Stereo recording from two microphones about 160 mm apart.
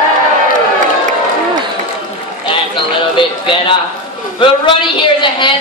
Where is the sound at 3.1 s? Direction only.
30° left (ahead or behind).